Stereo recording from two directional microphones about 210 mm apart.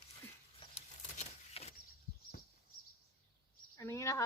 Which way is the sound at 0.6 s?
30° left (ahead or behind).